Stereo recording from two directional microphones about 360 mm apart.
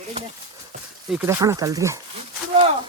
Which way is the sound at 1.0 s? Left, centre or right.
Centre.